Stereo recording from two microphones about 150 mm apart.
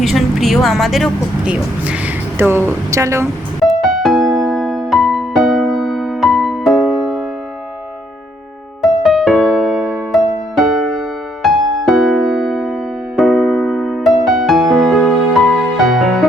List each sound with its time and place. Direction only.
0.0 s speech: centre (ahead or behind); by 3.2 s 20° right (ahead or behind)
3.6 s music: centre (ahead or behind)
8.8 s music: centre (ahead or behind)